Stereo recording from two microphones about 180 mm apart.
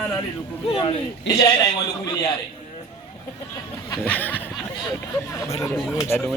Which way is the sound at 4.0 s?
10° left (ahead or behind).